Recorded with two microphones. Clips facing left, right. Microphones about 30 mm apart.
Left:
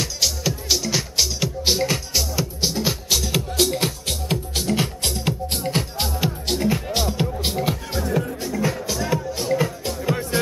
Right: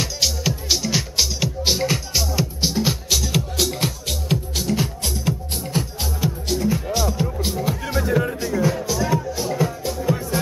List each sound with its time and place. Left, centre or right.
0.0 s music: centre
4.7 s music: left
8.4 s music: centre
8.8 s music: centre
10.0 s music: left